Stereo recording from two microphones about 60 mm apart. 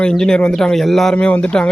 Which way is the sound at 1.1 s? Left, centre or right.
Centre.